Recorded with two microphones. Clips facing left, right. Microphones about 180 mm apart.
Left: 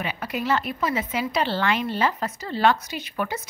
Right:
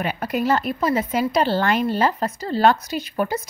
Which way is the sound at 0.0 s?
45° right (ahead or behind).